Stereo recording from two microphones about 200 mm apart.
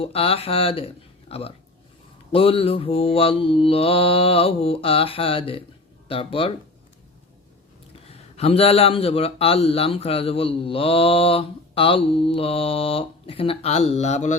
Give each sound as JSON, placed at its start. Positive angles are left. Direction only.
{"t": 0.0, "sound": "speech", "side_deg": 30}
{"t": 8.1, "sound": "speech", "side_deg": 30}